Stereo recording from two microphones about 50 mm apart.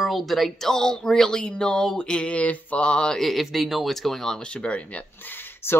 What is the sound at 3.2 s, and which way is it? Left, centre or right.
Speech, centre.